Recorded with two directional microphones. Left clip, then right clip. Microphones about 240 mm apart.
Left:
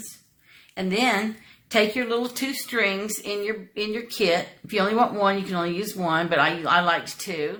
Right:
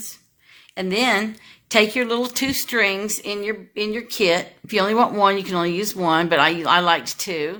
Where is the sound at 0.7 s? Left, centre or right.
Right.